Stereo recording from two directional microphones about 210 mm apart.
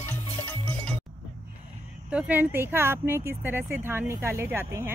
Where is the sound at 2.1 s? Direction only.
10° right (ahead or behind).